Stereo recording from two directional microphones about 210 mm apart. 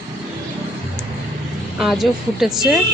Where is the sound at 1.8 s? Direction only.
Centre (ahead or behind).